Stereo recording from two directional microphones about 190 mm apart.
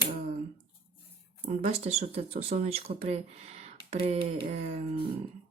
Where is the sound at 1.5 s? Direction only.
35° right (ahead or behind).